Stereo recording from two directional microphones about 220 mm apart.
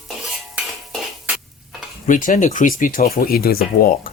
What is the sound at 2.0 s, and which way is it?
Speech, 35° left (ahead or behind).